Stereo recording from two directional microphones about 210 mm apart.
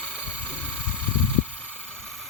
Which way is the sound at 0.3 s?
5° left (ahead or behind).